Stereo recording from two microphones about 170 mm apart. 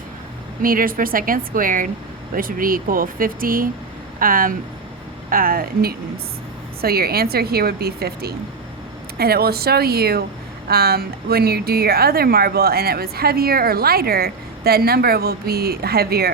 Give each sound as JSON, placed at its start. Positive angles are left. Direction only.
{"t": 0.6, "sound": "a woman's voice", "side_deg": -55}